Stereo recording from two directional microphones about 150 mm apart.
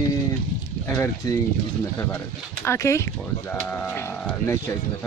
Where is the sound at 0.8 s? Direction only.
15° left (ahead or behind).